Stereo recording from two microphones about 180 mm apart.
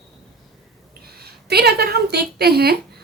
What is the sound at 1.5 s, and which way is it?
A woman's voice, 65° right (ahead or behind).